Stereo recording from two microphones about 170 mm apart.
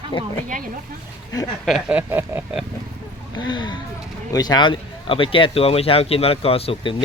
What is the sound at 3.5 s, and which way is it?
A man's voice, 25° left (ahead or behind).